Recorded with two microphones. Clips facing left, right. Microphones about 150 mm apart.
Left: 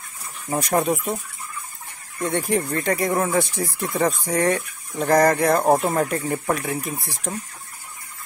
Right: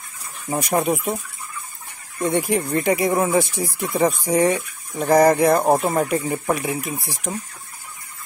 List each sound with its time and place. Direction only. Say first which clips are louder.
0.5 s speech: even; 5° right (ahead or behind)
2.2 s speech: right 2 dB; 10° right (ahead or behind)